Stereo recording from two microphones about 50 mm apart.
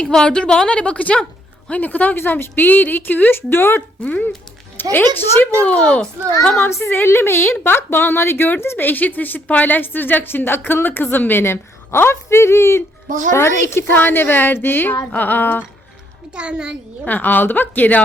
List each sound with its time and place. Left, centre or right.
0.0 s a woman's voice: centre
1.1 s a sound: centre
1.7 s a woman's voice: left
2.1 s a woman's voice: left
4.0 s a woman's voice: left
4.8 s a woman's voice: left
5.6 s a woman's voice: left
6.6 s a woman's voice: left
13.9 s a woman's voice: left
16.3 s a child's voice: right
17.1 s a woman's voice: left